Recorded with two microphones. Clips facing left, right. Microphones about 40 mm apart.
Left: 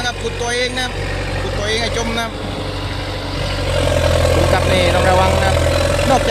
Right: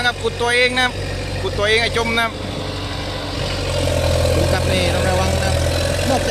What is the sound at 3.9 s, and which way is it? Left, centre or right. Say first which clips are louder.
Vehicle: left 3 dB; left.